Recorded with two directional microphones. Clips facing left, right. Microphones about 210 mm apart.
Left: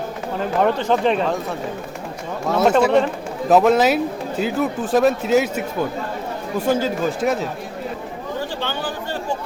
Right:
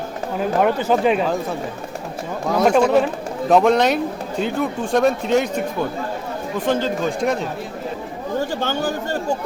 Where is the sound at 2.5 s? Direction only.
5° left (ahead or behind).